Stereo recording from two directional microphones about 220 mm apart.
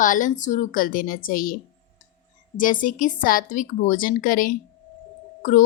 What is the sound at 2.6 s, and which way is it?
Speech, 35° left (ahead or behind).